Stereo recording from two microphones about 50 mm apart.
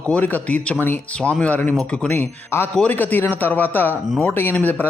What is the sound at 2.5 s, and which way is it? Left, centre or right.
Speech, left.